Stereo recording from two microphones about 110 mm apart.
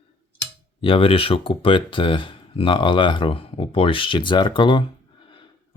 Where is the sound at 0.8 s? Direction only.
55° left (ahead or behind).